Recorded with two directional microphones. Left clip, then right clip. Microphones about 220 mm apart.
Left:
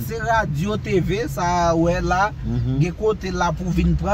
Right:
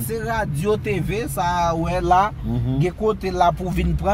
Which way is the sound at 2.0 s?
25° right (ahead or behind).